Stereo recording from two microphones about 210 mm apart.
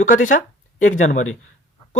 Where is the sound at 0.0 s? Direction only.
40° left (ahead or behind).